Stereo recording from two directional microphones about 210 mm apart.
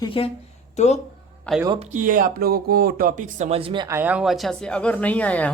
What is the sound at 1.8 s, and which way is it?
Speech, 40° right (ahead or behind).